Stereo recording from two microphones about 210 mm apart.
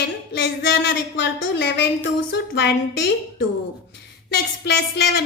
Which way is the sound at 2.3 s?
55° left (ahead or behind).